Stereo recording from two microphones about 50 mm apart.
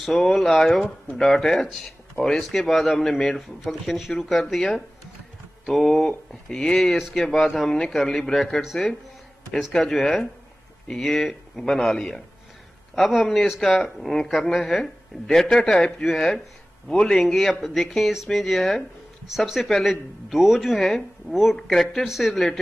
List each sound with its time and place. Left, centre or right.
0.0 s speech: centre